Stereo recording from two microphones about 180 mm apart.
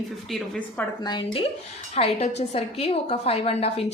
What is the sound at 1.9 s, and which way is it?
A woman's voice, 35° left (ahead or behind).